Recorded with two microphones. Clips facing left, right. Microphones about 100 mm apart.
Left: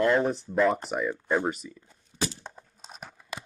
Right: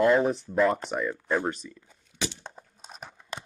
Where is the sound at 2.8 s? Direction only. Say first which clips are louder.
Even; centre (ahead or behind).